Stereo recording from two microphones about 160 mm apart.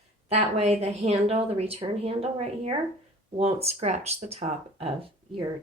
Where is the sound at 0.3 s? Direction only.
40° right (ahead or behind).